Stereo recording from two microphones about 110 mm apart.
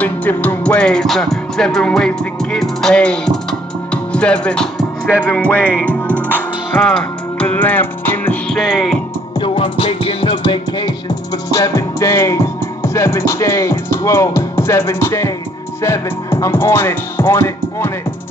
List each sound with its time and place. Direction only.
0.0 s music: 15° left (ahead or behind)
6.8 s music: 5° left (ahead or behind)
8.5 s music: centre (ahead or behind)
9.4 s music: 55° left (ahead or behind); by 17.9 s 20° left (ahead or behind)